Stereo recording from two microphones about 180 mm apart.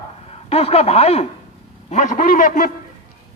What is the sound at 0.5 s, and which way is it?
A man's voice, 35° left (ahead or behind).